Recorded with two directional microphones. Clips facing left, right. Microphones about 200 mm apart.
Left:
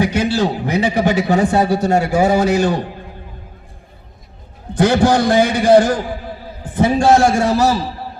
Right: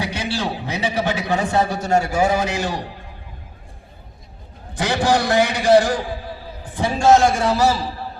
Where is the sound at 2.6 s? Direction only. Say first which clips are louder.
Left 8 dB; 50° left (ahead or behind).